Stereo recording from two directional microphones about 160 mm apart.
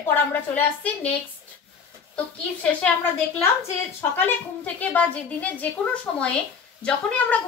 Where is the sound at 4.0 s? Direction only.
10° left (ahead or behind).